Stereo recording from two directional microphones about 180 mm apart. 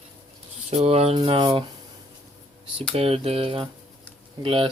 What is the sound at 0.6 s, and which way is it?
Speech, 35° right (ahead or behind).